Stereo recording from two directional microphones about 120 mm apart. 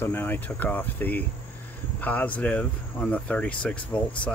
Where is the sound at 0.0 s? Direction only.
20° left (ahead or behind).